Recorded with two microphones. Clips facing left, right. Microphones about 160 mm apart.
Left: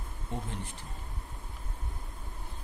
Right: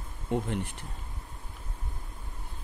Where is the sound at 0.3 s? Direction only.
70° right (ahead or behind).